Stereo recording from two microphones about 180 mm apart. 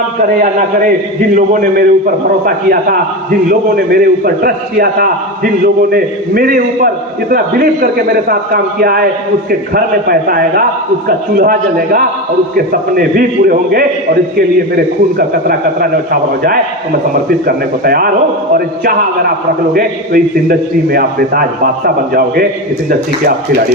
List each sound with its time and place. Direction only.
1.4 s a man's voice: 50° right (ahead or behind)
15.3 s a man's voice: 55° right (ahead or behind)
17.2 s a man's voice: 55° right (ahead or behind)
19.7 s a man's voice: 55° right (ahead or behind)